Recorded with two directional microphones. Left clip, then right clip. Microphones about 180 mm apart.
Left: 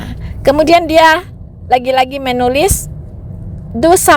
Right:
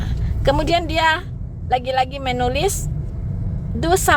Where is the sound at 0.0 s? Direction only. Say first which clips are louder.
Left 8 dB; 35° left (ahead or behind).